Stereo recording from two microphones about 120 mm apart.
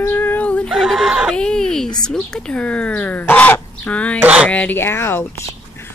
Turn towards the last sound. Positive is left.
turn(degrees=20)  # may be behind; listen again after turning